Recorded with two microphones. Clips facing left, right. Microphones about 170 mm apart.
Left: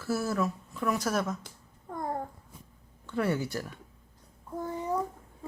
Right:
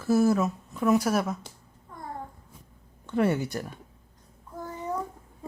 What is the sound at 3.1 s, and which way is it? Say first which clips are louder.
Speech: right 4 dB; 20° right (ahead or behind).